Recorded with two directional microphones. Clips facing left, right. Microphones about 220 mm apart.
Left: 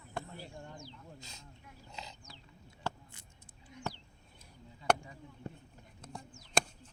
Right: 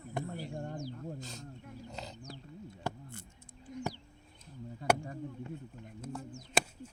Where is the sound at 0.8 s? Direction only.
45° right (ahead or behind).